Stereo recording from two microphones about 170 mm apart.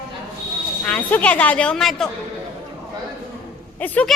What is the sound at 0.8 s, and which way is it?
A woman's voice, 10° left (ahead or behind).